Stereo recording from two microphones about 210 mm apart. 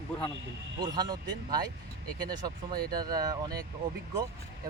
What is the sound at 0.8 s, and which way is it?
Speech, 20° right (ahead or behind).